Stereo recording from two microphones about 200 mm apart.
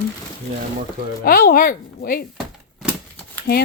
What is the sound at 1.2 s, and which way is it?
Speech, 45° left (ahead or behind).